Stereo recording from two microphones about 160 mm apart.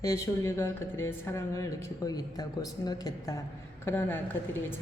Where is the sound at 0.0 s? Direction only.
20° left (ahead or behind).